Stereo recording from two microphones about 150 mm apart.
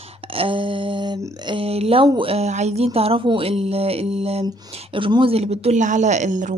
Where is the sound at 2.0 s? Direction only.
35° right (ahead or behind).